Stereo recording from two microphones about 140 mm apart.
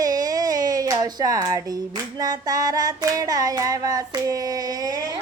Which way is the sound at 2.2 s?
25° right (ahead or behind).